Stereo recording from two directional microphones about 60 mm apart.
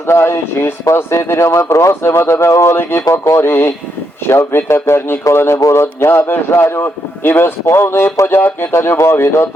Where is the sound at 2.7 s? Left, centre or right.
Left.